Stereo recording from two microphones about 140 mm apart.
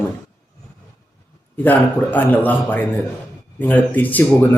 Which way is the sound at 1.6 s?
10° left (ahead or behind).